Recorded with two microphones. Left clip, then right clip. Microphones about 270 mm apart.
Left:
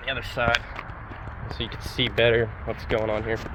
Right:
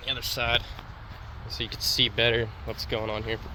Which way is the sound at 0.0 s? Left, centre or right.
Right.